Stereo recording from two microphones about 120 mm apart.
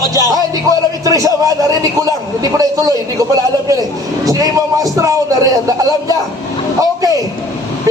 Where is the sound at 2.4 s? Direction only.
30° right (ahead or behind).